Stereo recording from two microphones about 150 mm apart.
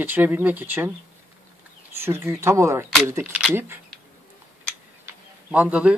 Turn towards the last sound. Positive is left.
turn(degrees=-10)  # may be behind; listen again after turning